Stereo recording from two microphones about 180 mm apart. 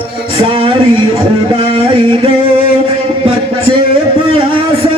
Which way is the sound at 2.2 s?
30° right (ahead or behind).